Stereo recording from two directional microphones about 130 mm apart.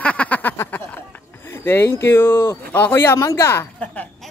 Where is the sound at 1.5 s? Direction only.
15° left (ahead or behind).